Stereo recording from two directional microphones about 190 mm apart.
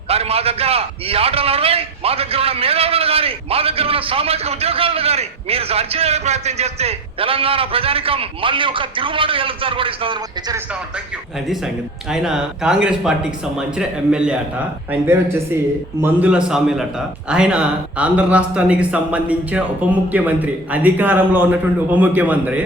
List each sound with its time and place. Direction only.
0.1 s a man's voice: 30° right (ahead or behind)
11.4 s speech: centre (ahead or behind)
16.0 s a man's voice: 10° right (ahead or behind)